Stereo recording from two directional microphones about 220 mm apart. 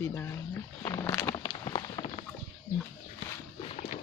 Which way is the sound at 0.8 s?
15° left (ahead or behind).